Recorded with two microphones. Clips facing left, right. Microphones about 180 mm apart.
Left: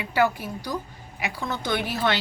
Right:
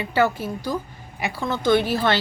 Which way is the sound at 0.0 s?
10° left (ahead or behind).